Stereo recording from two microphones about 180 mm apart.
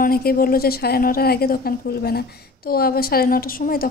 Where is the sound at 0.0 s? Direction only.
55° left (ahead or behind).